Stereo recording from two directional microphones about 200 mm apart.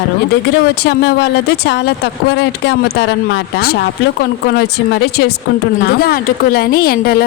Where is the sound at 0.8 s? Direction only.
60° left (ahead or behind).